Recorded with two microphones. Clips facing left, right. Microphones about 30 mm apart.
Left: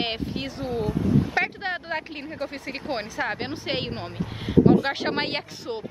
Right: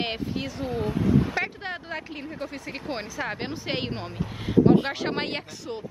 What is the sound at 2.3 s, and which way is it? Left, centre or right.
Speech, left.